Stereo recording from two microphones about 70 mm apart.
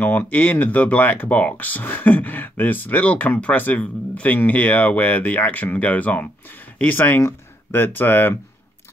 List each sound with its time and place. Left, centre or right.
0.0 s speech: left